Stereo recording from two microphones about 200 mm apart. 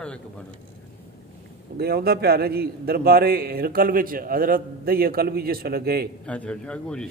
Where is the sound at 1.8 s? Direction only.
50° right (ahead or behind).